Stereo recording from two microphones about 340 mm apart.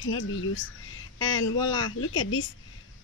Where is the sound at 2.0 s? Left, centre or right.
Left.